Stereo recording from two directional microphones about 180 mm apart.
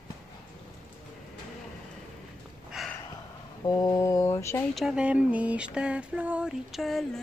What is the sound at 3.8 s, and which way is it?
Speech, 20° left (ahead or behind).